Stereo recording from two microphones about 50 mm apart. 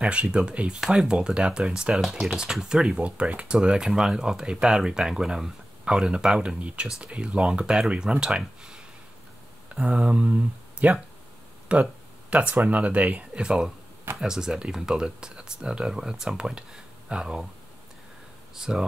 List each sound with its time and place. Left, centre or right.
0.0 s speech: right
2.0 s speech: centre; by 13.4 s right
13.4 s speech: centre
18.6 s speech: centre